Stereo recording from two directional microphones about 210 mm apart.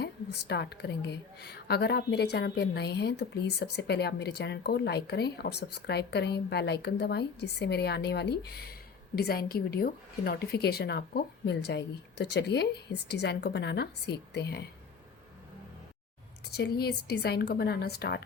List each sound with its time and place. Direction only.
0.0 s a woman's voice: 50° left (ahead or behind)
16.6 s a woman's voice: 50° left (ahead or behind)